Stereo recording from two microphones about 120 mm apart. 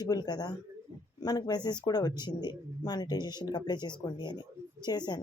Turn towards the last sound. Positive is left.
turn(degrees=35)  # may be behind; listen again after turning